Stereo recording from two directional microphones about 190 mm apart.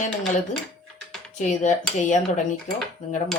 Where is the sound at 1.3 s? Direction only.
40° left (ahead or behind).